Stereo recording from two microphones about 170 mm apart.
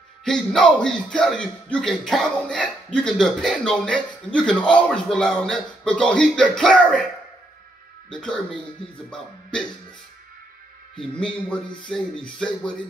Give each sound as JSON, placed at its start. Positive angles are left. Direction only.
{"t": 0.2, "sound": "speech", "side_deg": 5}
{"t": 8.1, "sound": "speech", "side_deg": 5}
{"t": 11.1, "sound": "a man's voice", "side_deg": 5}